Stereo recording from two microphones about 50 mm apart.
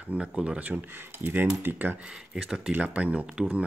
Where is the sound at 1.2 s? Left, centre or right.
Right.